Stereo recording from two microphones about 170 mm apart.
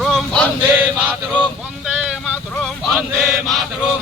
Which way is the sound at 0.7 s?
10° right (ahead or behind).